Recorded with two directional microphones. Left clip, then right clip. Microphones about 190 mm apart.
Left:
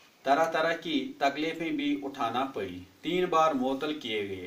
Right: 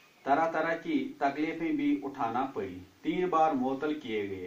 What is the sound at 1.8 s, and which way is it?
A man's voice, 40° left (ahead or behind).